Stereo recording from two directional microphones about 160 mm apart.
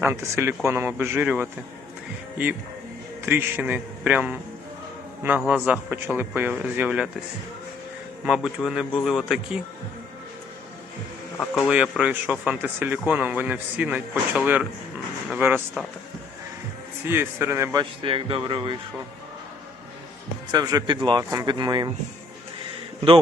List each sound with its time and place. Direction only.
0.0 s speech: 15° right (ahead or behind)
3.2 s speech: 15° right (ahead or behind)
5.5 s speech: 5° right (ahead or behind)
8.2 s a man's voice: 5° right (ahead or behind)
11.3 s speech: 5° right (ahead or behind)
17.1 s speech: 15° right (ahead or behind)
18.0 s speech: 35° right (ahead or behind)
20.5 s speech: 25° right (ahead or behind)